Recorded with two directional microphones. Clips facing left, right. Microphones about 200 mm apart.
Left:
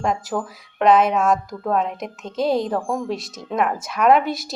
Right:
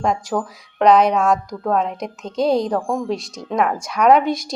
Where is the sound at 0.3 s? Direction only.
45° right (ahead or behind).